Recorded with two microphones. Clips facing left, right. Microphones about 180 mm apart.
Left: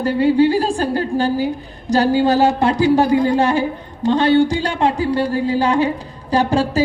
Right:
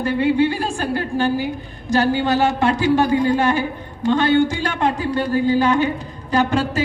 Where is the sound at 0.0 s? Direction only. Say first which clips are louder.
Left 3 dB; 35° left (ahead or behind).